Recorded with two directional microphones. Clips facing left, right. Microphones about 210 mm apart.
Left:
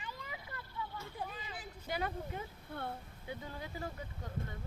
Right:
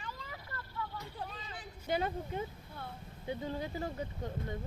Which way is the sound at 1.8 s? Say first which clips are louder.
Right 4 dB; 25° right (ahead or behind).